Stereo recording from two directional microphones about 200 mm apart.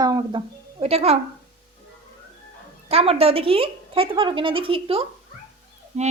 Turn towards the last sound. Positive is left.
turn(degrees=-35)  # may be behind; listen again after turning